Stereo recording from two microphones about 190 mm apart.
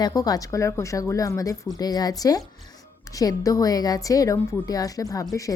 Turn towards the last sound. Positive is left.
turn(degrees=15)  # may be behind; listen again after turning